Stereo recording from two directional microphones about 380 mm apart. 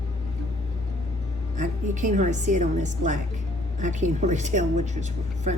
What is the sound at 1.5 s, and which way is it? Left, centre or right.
A woman's voice, centre.